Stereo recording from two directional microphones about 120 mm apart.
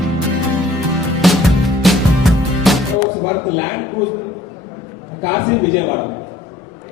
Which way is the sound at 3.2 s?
20° left (ahead or behind).